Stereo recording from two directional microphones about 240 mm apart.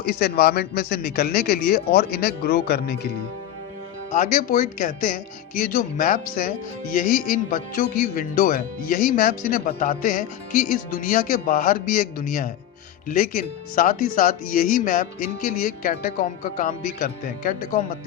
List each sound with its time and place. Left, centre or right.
0.0 s speech: left
4.1 s speech: left